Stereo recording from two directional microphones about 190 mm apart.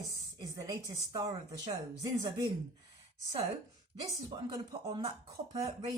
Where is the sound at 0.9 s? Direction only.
20° right (ahead or behind).